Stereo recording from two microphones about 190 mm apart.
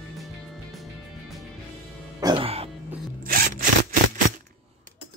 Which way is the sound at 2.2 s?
25° right (ahead or behind).